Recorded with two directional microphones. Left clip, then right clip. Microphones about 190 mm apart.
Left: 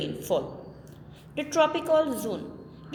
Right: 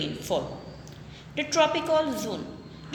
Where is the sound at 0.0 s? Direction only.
50° left (ahead or behind).